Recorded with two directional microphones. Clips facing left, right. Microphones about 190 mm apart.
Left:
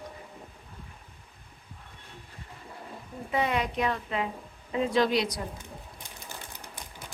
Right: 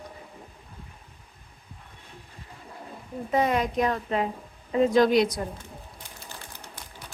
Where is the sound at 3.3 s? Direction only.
40° right (ahead or behind).